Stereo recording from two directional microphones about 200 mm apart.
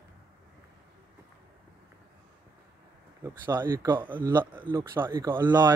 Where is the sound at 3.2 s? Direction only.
10° right (ahead or behind).